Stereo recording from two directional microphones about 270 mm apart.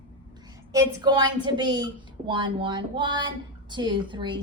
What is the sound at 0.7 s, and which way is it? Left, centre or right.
A woman's voice, centre.